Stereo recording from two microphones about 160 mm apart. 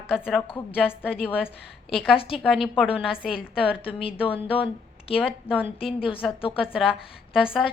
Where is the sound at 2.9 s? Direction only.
35° left (ahead or behind).